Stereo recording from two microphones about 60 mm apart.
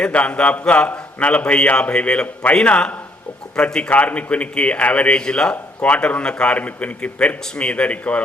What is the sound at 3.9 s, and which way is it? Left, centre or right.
A man's voice, left.